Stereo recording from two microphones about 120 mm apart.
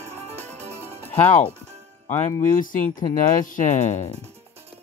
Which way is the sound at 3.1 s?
90° left.